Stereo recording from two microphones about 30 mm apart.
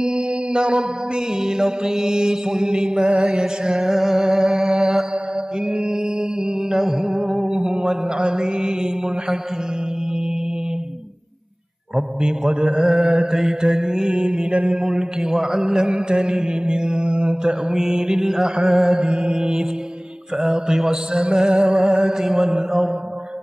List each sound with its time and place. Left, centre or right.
0.0 s mantra: right
1.4 s mantra: centre
3.3 s music: centre
6.7 s music: centre
7.1 s music: right
7.4 s mantra: right
12.6 s music: centre
13.6 s mantra: right
17.4 s mantra: right
17.7 s music: centre
18.7 s mantra: centre
19.3 s music: right
20.4 s mantra: right